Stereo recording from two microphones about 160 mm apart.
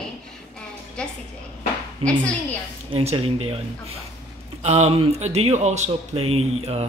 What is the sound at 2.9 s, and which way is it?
Speech, 35° right (ahead or behind).